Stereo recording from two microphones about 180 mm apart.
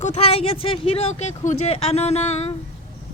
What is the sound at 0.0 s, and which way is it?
Speech, 40° left (ahead or behind).